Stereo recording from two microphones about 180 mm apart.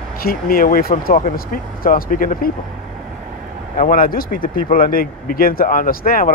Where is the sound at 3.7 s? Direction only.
50° left (ahead or behind).